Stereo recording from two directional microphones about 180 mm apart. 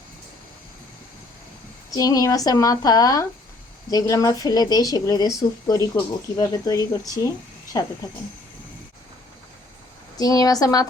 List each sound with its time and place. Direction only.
2.0 s speech: 20° left (ahead or behind)
10.2 s speech: 20° left (ahead or behind)